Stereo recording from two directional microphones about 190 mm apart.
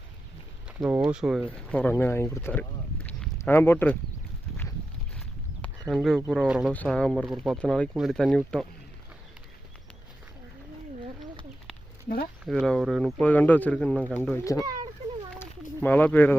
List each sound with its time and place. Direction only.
0.8 s speech: 5° right (ahead or behind)
1.7 s speech: 10° left (ahead or behind)
5.9 s speech: centre (ahead or behind)
12.0 s speech: 50° left (ahead or behind)
12.5 s speech: centre (ahead or behind)
14.6 s speech: 20° right (ahead or behind)
15.4 s a sound: 10° left (ahead or behind)